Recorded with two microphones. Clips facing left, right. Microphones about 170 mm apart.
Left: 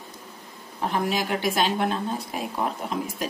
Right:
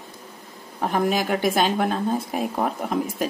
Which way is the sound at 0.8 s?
50° right (ahead or behind).